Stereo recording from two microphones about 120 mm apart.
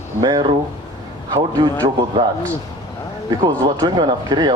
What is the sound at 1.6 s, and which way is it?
Speech, 40° right (ahead or behind).